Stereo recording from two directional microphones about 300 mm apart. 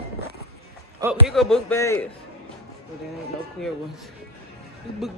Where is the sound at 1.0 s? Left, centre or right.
Centre.